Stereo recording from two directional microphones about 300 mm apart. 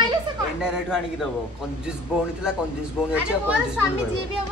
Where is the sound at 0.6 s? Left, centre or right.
Centre.